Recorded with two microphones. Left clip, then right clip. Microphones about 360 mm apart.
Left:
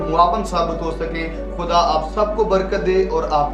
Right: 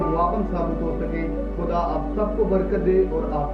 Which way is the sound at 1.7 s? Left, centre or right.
Left.